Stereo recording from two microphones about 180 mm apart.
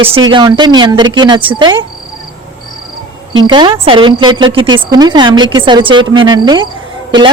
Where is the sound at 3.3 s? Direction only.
30° right (ahead or behind).